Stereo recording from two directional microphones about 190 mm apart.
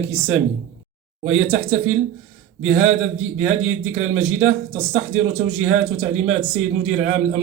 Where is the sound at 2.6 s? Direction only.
90° right.